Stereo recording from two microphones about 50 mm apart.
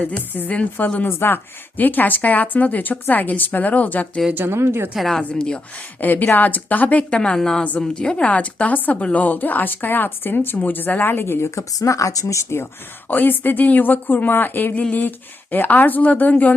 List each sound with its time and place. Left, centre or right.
0.2 s speech: left
0.5 s a woman's voice: left
1.0 s speech: left
4.4 s speech: right
4.9 s a woman's voice: centre
6.0 s speech: left
7.1 s a woman's voice: centre; by 11.4 s left
11.5 s speech: left
13.1 s speech: left